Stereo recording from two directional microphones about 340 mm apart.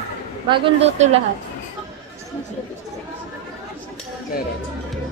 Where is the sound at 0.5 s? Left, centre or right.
Centre.